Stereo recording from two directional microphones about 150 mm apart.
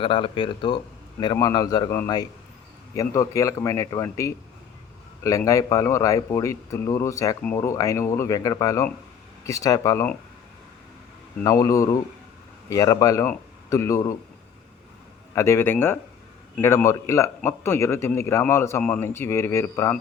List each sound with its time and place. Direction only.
0.0 s speech: 35° left (ahead or behind); by 4.4 s 20° left (ahead or behind)
5.5 s speech: 20° left (ahead or behind)
11.4 s speech: 20° left (ahead or behind)
15.4 s a man's voice: 15° left (ahead or behind)